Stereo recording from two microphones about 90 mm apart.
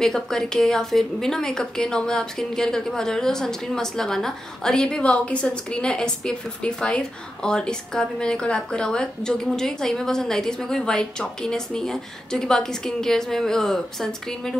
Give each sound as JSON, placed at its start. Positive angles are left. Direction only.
{"t": 0.0, "sound": "a woman's voice", "side_deg": 5}